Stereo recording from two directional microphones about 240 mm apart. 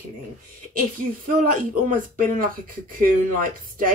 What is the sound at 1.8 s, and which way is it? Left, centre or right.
Speech, right.